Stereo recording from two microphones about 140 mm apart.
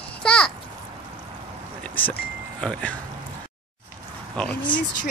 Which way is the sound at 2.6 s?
10° left (ahead or behind).